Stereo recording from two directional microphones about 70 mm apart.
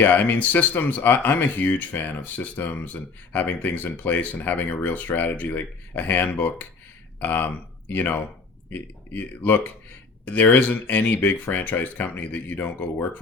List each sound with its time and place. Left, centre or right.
0.0 s speech: left